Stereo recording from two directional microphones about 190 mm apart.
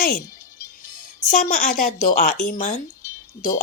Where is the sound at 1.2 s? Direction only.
45° left (ahead or behind).